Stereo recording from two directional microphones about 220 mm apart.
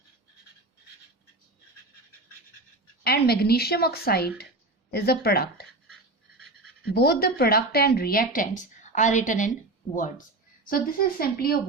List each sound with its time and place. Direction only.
3.0 s speech: 45° left (ahead or behind)
6.9 s speech: 45° left (ahead or behind)
10.7 s speech: 40° left (ahead or behind)